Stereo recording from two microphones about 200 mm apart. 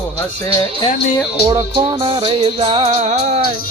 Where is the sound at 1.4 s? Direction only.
25° right (ahead or behind).